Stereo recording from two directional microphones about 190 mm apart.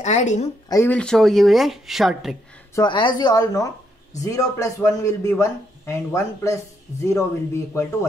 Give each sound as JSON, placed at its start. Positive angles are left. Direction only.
{"t": 0.0, "sound": "a woman's voice", "side_deg": 40}
{"t": 0.7, "sound": "speech", "side_deg": 10}
{"t": 2.7, "sound": "a man's voice", "side_deg": 25}